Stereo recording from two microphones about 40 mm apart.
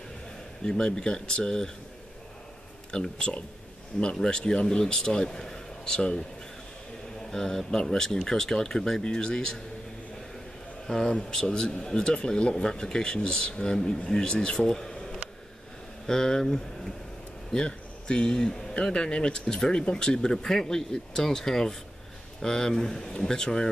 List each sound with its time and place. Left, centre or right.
0.7 s speech: centre
2.9 s speech: left
7.2 s speech: centre
11.1 s speech: left
19.4 s speech: centre
19.7 s speech: left